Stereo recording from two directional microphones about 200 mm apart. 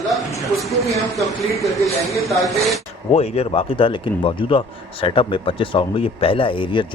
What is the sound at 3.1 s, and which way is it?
Speech, 30° left (ahead or behind).